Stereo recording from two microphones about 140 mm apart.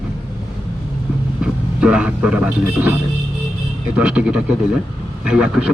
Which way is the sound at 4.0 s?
10° right (ahead or behind).